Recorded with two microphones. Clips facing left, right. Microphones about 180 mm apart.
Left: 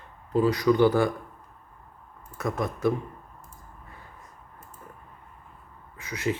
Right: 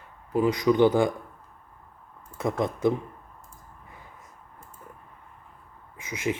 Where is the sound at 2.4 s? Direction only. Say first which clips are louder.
Right 2 dB; 25° right (ahead or behind).